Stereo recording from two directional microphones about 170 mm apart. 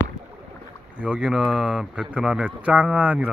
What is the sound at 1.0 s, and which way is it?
Speech, 5° right (ahead or behind).